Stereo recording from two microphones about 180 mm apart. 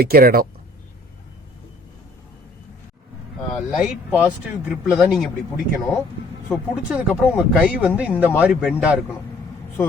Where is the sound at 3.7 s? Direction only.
5° right (ahead or behind).